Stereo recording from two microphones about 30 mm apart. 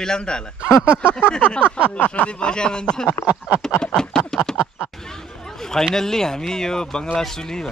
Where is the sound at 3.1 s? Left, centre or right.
Right.